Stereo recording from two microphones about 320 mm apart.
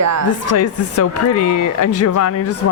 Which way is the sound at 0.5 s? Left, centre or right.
Left.